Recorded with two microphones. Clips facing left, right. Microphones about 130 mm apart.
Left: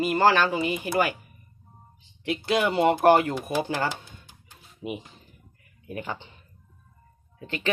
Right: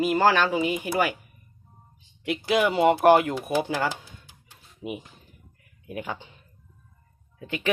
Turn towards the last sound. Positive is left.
turn(degrees=-10)  # may be behind; listen again after turning